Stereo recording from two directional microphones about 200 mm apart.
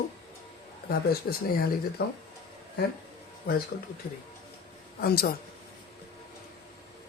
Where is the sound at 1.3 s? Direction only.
50° left (ahead or behind).